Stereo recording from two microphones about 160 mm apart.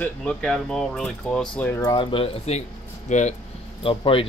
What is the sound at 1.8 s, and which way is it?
Speech, 30° left (ahead or behind).